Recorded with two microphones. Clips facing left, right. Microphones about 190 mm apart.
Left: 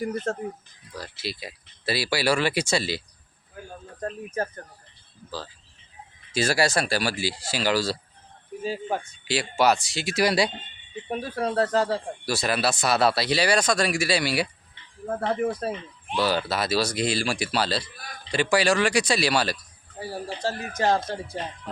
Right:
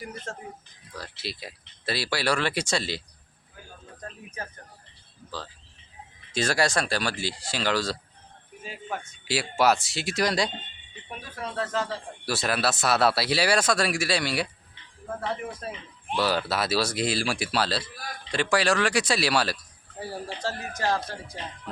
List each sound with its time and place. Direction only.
0.3 s speech: 55° left (ahead or behind)
0.9 s speech: centre (ahead or behind)
4.4 s speech: 40° left (ahead or behind)
6.3 s speech: 5° left (ahead or behind)
8.6 s speech: 35° left (ahead or behind)
9.2 s speech: 5° right (ahead or behind)
11.1 s speech: 40° left (ahead or behind)
12.2 s speech: centre (ahead or behind)
15.0 s speech: 45° left (ahead or behind)
16.1 s speech: centre (ahead or behind)
20.0 s speech: 15° left (ahead or behind)